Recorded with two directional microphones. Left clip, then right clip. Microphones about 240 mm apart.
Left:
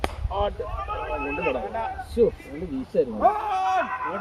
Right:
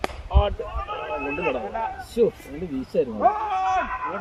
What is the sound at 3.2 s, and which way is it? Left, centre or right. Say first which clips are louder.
Speech: right 1 dB; left.